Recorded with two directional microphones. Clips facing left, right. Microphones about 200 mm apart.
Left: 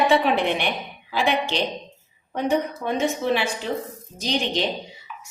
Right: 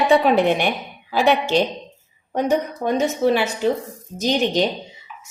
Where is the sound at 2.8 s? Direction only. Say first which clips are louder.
Right 7 dB; 40° right (ahead or behind).